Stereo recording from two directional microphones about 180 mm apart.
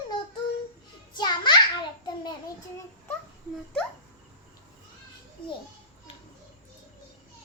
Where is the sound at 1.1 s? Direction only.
25° left (ahead or behind).